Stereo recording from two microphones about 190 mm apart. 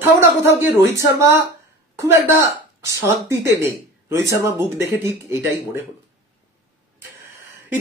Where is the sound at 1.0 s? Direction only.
15° right (ahead or behind).